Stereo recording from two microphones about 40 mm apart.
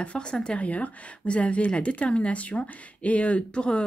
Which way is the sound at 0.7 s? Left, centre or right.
Left.